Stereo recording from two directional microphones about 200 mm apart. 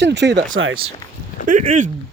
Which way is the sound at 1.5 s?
40° right (ahead or behind).